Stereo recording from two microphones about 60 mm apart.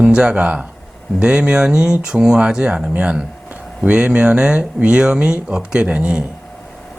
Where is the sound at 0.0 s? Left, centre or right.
Centre.